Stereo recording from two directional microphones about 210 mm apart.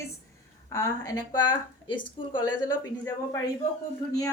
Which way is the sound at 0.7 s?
15° left (ahead or behind).